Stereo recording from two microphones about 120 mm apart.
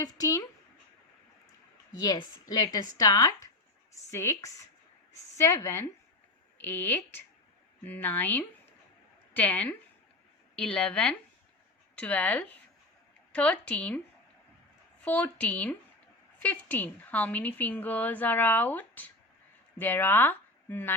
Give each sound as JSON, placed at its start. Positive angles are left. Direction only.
{"t": 0.0, "sound": "a woman's voice", "side_deg": 30}
{"t": 2.0, "sound": "a woman's voice", "side_deg": 30}
{"t": 15.0, "sound": "a woman's voice", "side_deg": 15}